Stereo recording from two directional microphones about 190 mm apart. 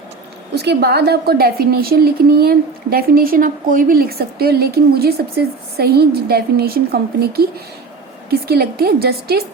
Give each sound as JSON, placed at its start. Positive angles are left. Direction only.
{"t": 0.5, "sound": "a woman's voice", "side_deg": -60}